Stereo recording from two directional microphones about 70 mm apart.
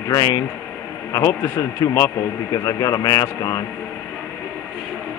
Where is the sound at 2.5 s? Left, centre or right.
Left.